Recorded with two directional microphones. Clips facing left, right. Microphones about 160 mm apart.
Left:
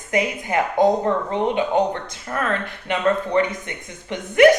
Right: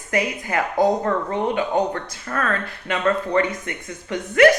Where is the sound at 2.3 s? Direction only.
20° left (ahead or behind).